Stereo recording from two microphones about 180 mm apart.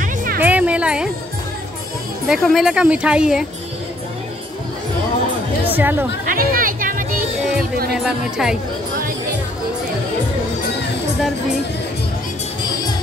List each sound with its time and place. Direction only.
0.0 s music: 50° right (ahead or behind)
0.4 s music: 10° right (ahead or behind)
2.2 s speech: centre (ahead or behind)
5.7 s speech: 10° right (ahead or behind)
6.2 s a sound: 50° right (ahead or behind)
7.9 s speech: 5° right (ahead or behind)